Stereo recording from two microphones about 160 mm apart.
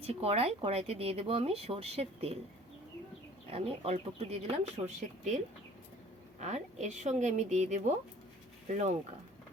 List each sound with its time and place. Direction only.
0.0 s speech: 40° right (ahead or behind)
3.4 s speech: 40° right (ahead or behind)
6.4 s speech: 45° right (ahead or behind)